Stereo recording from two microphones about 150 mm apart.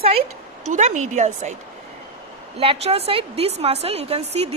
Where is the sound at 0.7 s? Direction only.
50° right (ahead or behind).